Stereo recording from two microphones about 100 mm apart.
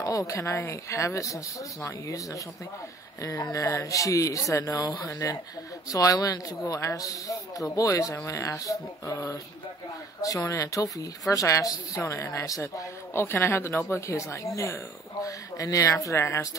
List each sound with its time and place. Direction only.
0.0 s a woman's voice: 35° left (ahead or behind)